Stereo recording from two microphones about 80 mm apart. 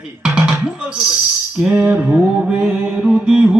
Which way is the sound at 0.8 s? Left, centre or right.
Centre.